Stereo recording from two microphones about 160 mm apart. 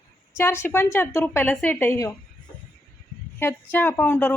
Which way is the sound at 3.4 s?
15° left (ahead or behind).